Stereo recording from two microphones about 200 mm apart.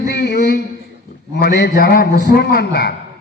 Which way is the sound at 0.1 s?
55° left (ahead or behind).